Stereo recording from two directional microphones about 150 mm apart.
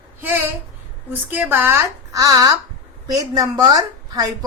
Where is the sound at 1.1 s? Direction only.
10° right (ahead or behind).